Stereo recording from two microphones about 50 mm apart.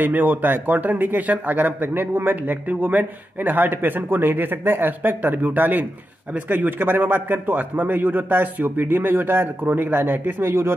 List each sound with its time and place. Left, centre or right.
0.0 s a man's voice: right